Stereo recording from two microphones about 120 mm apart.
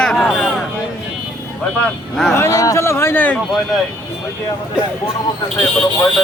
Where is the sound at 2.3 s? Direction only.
25° left (ahead or behind).